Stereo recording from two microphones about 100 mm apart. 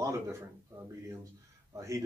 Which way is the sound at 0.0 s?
30° right (ahead or behind).